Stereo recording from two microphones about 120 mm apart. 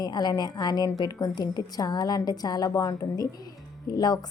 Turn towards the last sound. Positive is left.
turn(degrees=35)  # may be behind; listen again after turning